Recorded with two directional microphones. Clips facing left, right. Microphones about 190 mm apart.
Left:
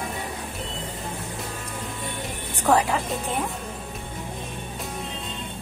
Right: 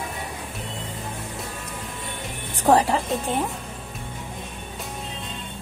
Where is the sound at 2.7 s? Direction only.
30° right (ahead or behind).